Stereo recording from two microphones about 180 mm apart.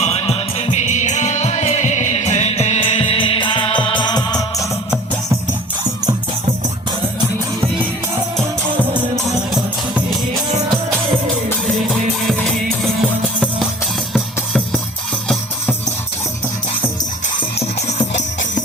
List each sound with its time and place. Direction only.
0.0 s music: 35° left (ahead or behind)
11.6 s music: centre (ahead or behind)
17.3 s music: 35° left (ahead or behind)